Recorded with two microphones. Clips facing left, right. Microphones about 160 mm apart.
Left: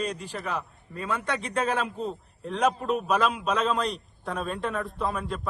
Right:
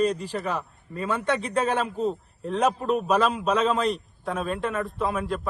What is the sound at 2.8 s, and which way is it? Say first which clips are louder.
Speech: right 3 dB; 35° right (ahead or behind).